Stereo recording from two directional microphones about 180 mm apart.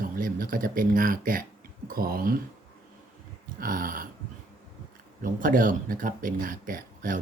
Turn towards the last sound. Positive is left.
turn(degrees=-50)  # may be behind; listen again after turning